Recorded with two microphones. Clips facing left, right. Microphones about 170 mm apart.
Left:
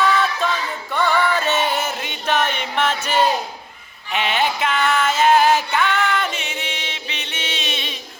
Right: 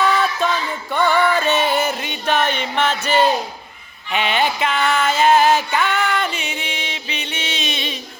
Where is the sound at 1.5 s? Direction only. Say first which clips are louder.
Right 3 dB; centre (ahead or behind).